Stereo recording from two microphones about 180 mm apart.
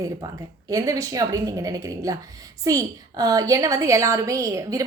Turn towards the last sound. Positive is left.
turn(degrees=-20)  # may be behind; listen again after turning